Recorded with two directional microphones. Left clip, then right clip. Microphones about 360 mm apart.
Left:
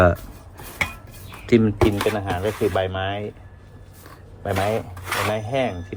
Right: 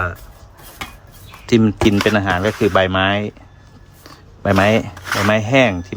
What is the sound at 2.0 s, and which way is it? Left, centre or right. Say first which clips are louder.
Speech: right 7 dB; right.